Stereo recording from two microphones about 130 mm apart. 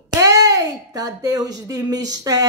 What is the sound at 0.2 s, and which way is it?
A child's voice, 25° right (ahead or behind).